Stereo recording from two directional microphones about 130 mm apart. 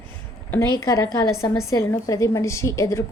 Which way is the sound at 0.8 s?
25° left (ahead or behind).